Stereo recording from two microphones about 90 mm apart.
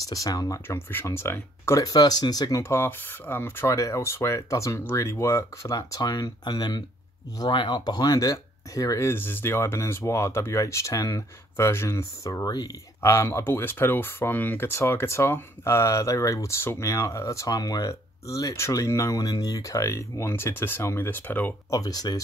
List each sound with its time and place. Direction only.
0.1 s speech: 40° left (ahead or behind)
0.7 s speech: 25° left (ahead or behind)
1.8 s speech: 45° left (ahead or behind)
2.6 s speech: 25° left (ahead or behind); by 12.6 s 45° left (ahead or behind)
13.0 s speech: 30° left (ahead or behind)
21.6 s speech: 45° left (ahead or behind)